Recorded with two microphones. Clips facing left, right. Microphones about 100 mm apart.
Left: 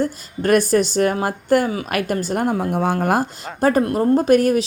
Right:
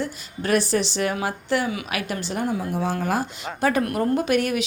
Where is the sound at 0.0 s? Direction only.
45° left (ahead or behind).